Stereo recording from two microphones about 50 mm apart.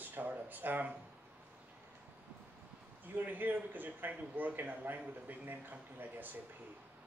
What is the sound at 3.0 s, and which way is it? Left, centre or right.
A man's voice, right.